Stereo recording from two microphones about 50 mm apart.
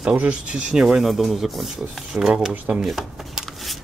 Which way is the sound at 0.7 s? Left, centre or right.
Centre.